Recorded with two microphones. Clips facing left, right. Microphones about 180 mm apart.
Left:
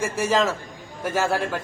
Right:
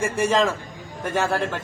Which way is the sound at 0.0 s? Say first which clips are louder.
Right 1 dB; centre (ahead or behind).